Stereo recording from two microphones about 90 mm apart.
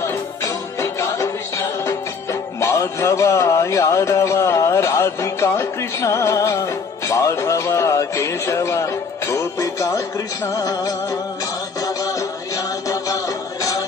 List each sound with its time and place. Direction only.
0.7 s music: 35° left (ahead or behind)
2.6 s speech: 30° left (ahead or behind)
11.8 s music: 40° left (ahead or behind)